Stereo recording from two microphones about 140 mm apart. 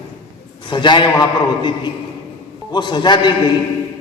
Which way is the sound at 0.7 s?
35° left (ahead or behind).